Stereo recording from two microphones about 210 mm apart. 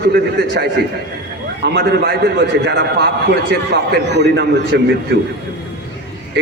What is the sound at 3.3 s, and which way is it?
A man's voice, 55° right (ahead or behind).